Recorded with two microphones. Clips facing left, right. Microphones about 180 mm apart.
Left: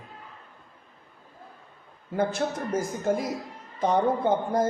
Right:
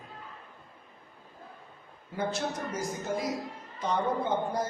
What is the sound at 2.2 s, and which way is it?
A woman's voice, 50° left (ahead or behind).